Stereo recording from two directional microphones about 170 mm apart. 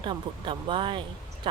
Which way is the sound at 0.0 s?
30° right (ahead or behind).